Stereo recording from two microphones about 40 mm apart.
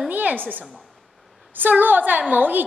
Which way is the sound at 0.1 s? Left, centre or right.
Right.